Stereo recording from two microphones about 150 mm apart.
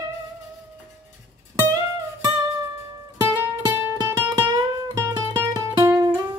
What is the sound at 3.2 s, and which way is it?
Music, 20° right (ahead or behind).